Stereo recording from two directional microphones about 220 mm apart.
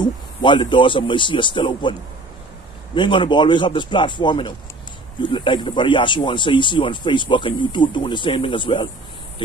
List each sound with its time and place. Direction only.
0.0 s speech: 20° left (ahead or behind)